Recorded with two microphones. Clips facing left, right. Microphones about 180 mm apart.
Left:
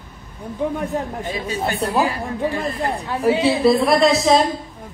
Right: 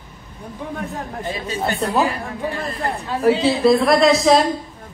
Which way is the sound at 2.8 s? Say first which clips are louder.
Even; 20° left (ahead or behind).